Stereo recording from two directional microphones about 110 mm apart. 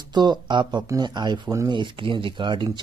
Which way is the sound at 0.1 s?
40° right (ahead or behind).